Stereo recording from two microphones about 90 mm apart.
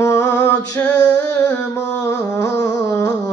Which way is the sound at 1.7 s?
45° left (ahead or behind).